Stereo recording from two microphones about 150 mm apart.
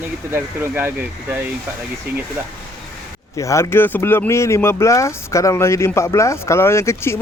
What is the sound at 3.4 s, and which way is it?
Speech, 20° left (ahead or behind).